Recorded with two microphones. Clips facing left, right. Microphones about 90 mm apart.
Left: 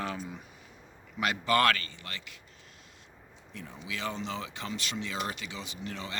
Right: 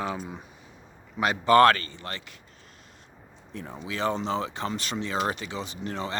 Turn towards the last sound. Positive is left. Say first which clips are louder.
# right 7 dB
turn(degrees=-35)  # may be behind; listen again after turning